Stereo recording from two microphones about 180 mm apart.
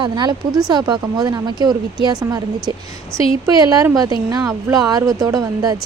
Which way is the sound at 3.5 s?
20° right (ahead or behind).